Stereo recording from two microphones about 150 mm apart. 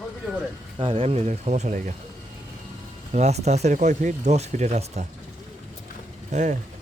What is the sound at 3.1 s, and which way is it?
Speech, 45° right (ahead or behind).